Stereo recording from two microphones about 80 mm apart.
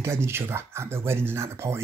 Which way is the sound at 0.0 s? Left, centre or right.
Right.